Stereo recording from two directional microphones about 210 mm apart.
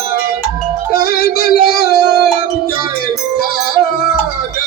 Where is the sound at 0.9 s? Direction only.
45° left (ahead or behind).